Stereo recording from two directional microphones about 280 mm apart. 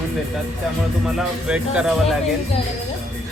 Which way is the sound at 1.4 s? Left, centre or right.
Centre.